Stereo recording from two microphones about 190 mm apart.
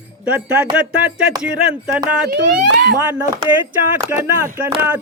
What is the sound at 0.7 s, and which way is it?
Speech, 5° right (ahead or behind).